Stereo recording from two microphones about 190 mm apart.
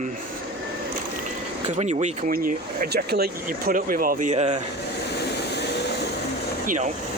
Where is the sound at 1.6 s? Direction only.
35° right (ahead or behind).